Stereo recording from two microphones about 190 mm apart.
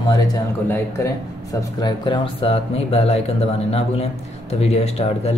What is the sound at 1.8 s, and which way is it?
Speech, 25° left (ahead or behind).